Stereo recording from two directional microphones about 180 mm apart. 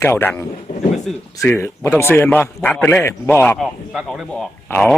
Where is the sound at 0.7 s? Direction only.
45° left (ahead or behind).